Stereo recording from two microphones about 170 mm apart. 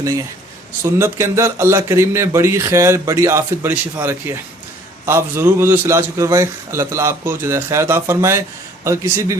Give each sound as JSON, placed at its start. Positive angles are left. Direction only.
{"t": 0.8, "sound": "a man's voice", "side_deg": -15}